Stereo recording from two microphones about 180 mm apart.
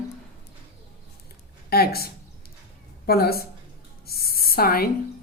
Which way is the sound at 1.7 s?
60° left (ahead or behind).